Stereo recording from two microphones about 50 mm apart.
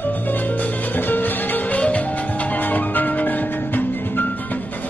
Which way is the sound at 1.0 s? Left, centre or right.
Left.